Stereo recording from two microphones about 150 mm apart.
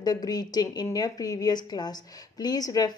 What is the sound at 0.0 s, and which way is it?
A woman's voice, 25° left (ahead or behind).